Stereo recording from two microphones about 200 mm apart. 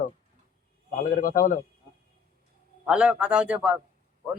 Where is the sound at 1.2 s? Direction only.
40° left (ahead or behind).